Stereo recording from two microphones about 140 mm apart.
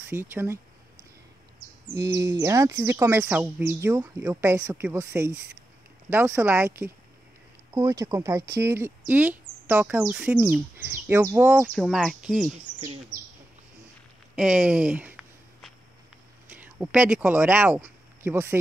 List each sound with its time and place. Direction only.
0.0 s speech: 15° right (ahead or behind)
2.0 s speech: 25° right (ahead or behind)
7.7 s speech: 25° right (ahead or behind)
11.7 s speech: centre (ahead or behind)
14.3 s speech: 5° right (ahead or behind)
16.5 s speech: 10° right (ahead or behind)